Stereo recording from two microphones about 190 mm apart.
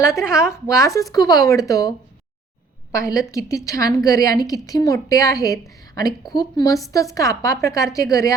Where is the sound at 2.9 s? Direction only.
15° left (ahead or behind).